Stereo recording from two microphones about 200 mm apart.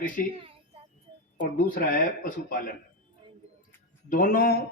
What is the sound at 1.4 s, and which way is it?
Speech, 45° left (ahead or behind).